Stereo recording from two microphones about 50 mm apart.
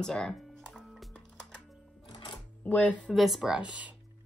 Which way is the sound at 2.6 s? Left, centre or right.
Left.